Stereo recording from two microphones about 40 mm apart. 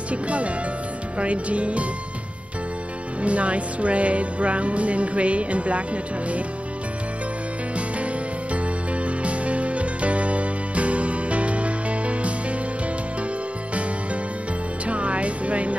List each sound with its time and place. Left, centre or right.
0.1 s music: right
3.2 s music: right
9.0 s music: right
14.9 s music: right